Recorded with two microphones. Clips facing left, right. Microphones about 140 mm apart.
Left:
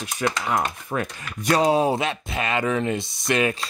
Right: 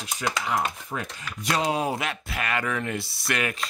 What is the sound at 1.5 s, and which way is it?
Speech, 30° left (ahead or behind).